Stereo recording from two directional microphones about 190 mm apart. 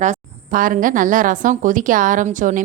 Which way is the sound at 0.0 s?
45° right (ahead or behind).